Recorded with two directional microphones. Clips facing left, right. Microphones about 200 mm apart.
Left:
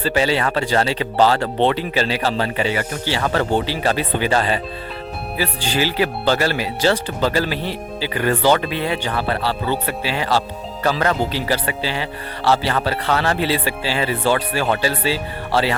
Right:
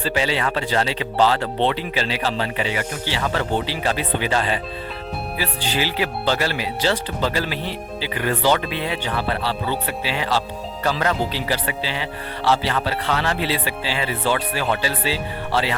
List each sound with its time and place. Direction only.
0.0 s speech: 40° left (ahead or behind)